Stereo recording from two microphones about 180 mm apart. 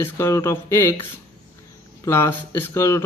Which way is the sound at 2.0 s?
15° left (ahead or behind).